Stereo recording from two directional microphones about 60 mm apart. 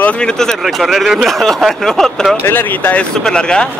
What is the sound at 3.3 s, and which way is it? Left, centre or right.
Speech, centre.